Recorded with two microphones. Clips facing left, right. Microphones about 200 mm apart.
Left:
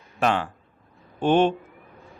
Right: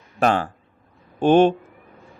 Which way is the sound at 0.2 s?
40° right (ahead or behind).